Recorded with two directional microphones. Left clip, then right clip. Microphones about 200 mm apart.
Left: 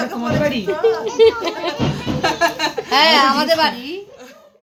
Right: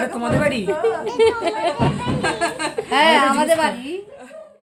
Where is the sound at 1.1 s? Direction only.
Centre (ahead or behind).